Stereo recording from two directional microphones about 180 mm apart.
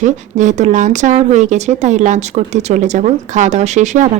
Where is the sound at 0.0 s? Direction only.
45° right (ahead or behind).